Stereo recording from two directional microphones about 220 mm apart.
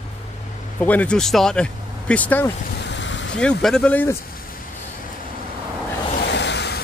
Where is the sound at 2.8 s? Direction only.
55° left (ahead or behind).